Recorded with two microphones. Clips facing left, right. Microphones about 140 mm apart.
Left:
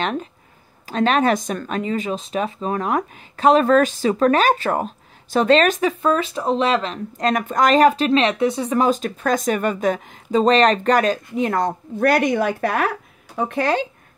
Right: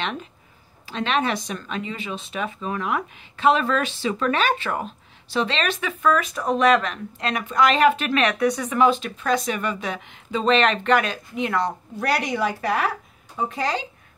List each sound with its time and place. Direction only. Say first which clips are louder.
0.0 s speech: left 5 dB; 40° left (ahead or behind)
7.2 s speech: left 3 dB; 45° left (ahead or behind)